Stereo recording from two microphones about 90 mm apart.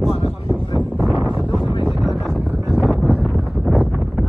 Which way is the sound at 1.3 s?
15° right (ahead or behind).